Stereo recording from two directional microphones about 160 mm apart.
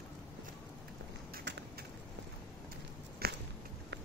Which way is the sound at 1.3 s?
90° right.